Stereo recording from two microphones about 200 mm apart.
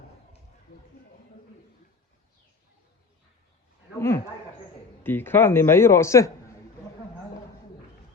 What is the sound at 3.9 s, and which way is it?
A man's voice, 15° left (ahead or behind).